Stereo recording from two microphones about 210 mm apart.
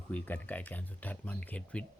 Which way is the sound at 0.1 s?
5° left (ahead or behind).